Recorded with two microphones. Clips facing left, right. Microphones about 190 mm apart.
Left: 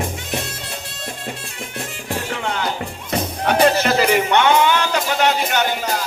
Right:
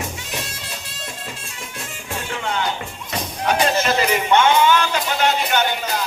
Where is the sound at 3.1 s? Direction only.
55° left (ahead or behind).